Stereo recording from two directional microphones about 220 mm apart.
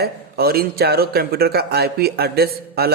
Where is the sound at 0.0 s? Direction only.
45° right (ahead or behind).